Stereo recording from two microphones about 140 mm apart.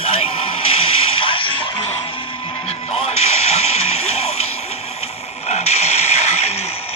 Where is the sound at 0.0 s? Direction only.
45° left (ahead or behind).